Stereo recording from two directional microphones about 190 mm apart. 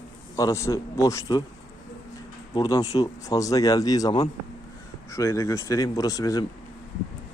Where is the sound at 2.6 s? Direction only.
20° left (ahead or behind).